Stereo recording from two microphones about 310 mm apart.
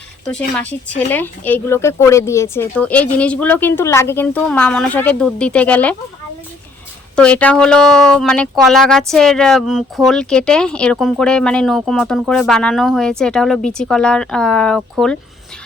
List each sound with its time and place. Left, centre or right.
0.9 s speech: centre
7.2 s speech: centre